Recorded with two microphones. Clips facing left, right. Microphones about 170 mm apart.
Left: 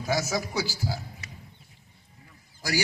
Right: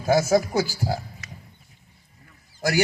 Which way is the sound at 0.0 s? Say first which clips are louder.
Right 9 dB; 55° right (ahead or behind).